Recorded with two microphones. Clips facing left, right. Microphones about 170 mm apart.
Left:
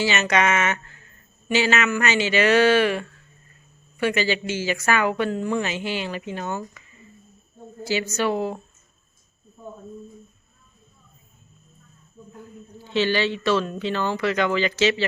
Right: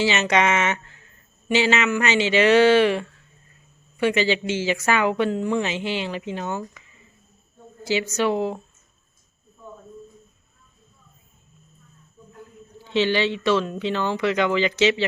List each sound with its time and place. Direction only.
0.0 s a woman's voice: 25° right (ahead or behind)
7.9 s a woman's voice: 20° right (ahead or behind)
12.9 s speech: 20° right (ahead or behind)